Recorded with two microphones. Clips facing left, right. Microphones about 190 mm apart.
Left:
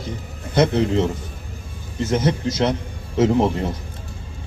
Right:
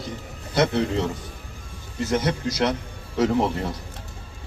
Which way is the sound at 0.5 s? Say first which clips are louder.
Left 4 dB; 20° left (ahead or behind).